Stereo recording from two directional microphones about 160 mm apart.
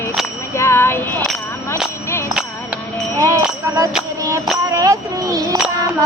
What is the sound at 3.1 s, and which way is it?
Music, 20° right (ahead or behind).